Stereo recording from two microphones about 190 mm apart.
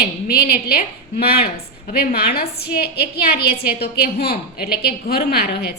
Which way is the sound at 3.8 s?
55° left (ahead or behind).